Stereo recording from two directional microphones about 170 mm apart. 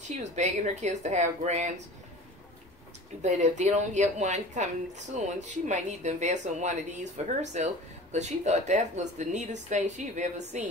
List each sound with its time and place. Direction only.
0.0 s a woman's voice: 45° right (ahead or behind)
3.2 s a woman's voice: 45° right (ahead or behind)